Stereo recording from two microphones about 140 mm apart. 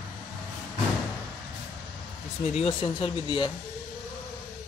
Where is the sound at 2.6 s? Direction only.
40° left (ahead or behind).